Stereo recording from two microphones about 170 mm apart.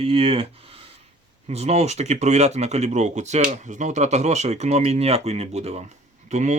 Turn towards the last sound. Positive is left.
turn(degrees=-45)  # may be behind; listen again after turning